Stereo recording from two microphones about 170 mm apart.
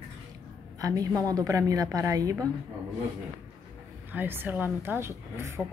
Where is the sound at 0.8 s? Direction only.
20° right (ahead or behind).